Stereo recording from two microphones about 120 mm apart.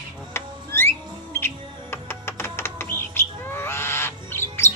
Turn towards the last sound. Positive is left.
turn(degrees=20)  # may be behind; listen again after turning